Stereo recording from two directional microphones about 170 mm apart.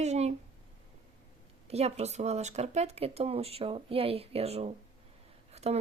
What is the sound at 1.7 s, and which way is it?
Speech, 40° right (ahead or behind).